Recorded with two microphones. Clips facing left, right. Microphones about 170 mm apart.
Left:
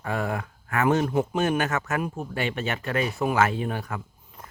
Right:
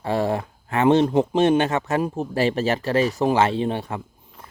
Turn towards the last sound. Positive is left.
turn(degrees=-30)  # may be behind; listen again after turning